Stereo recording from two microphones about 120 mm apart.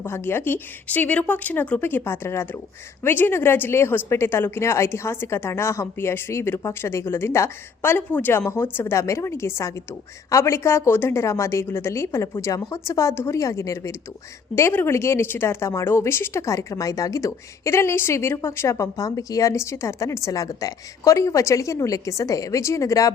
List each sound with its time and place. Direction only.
0.0 s a woman's voice: 20° left (ahead or behind)